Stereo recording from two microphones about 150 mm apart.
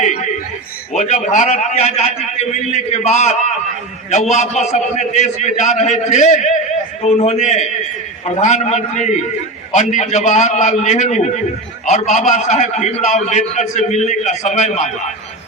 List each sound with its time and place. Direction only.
0.9 s a man's voice: 55° left (ahead or behind)